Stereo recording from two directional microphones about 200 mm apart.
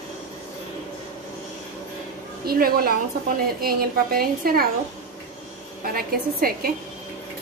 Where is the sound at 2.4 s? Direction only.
50° right (ahead or behind).